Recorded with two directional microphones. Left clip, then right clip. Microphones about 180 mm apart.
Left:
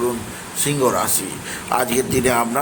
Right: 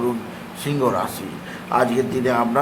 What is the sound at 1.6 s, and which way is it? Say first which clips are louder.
Speech: right 1 dB; 15° left (ahead or behind).